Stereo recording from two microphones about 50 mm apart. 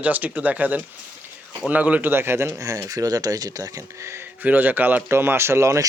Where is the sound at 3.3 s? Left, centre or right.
Right.